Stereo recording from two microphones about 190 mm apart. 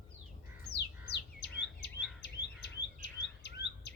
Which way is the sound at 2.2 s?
65° left (ahead or behind).